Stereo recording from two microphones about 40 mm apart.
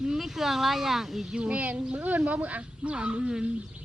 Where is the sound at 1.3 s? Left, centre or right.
Right.